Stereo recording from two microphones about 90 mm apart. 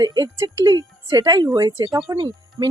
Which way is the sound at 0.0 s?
50° right (ahead or behind).